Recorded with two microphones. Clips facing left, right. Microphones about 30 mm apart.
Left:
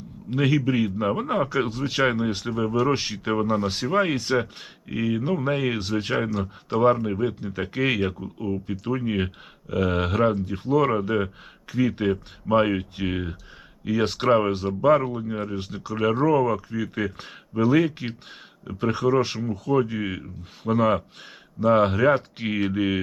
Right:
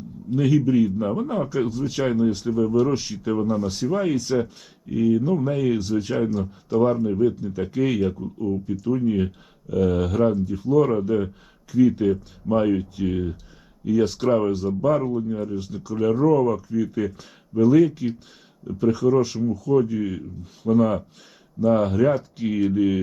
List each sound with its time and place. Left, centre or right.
0.3 s a man's voice: left